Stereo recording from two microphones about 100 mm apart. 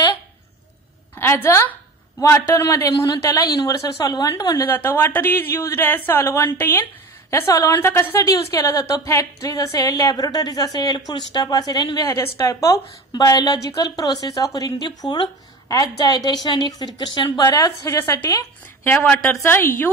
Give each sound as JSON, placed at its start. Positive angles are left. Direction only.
{"t": 1.1, "sound": "a woman's voice", "side_deg": 25}
{"t": 4.6, "sound": "a woman's voice", "side_deg": 20}
{"t": 13.1, "sound": "a woman's voice", "side_deg": 45}
{"t": 17.8, "sound": "a woman's voice", "side_deg": 30}
{"t": 18.9, "sound": "a woman's voice", "side_deg": 20}